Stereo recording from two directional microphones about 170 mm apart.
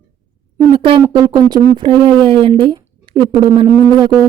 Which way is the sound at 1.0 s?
25° right (ahead or behind).